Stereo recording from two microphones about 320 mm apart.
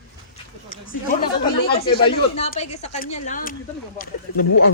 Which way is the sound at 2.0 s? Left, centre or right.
Centre.